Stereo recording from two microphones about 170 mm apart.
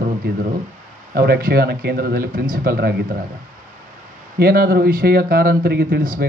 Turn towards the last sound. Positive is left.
turn(degrees=-55)  # may be behind; listen again after turning